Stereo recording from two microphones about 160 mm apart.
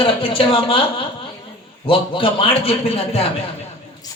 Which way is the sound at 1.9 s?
35° left (ahead or behind).